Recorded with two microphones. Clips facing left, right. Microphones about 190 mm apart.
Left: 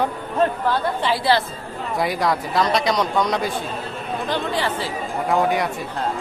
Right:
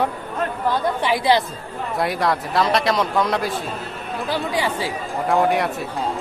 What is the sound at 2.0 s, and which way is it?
A man's voice, centre (ahead or behind).